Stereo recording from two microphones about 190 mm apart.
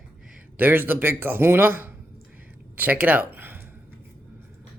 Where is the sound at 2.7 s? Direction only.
10° right (ahead or behind).